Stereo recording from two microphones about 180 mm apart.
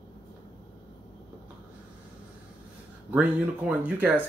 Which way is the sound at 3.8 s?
10° right (ahead or behind).